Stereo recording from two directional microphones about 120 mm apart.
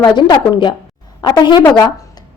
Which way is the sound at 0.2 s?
40° left (ahead or behind).